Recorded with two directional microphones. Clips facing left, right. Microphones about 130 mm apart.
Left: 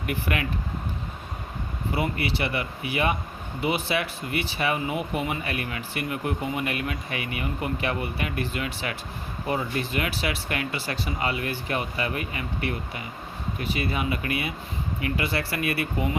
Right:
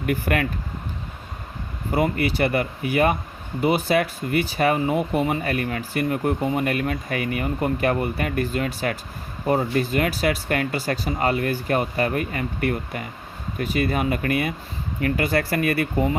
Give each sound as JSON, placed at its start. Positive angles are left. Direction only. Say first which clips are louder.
{"t": 0.0, "sound": "speech", "louder": "right 6 dB", "side_deg": -45}
{"t": 1.9, "sound": "speech", "louder": "right 6 dB", "side_deg": -45}